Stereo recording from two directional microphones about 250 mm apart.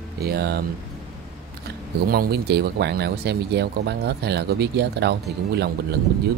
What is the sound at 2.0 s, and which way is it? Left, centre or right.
Speech, right.